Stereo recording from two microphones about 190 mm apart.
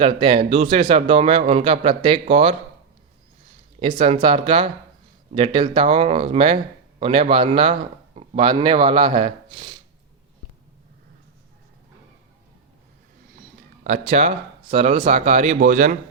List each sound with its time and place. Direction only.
0.0 s speech: 30° right (ahead or behind)
4.0 s a man's voice: 30° right (ahead or behind)
13.8 s speech: 35° right (ahead or behind)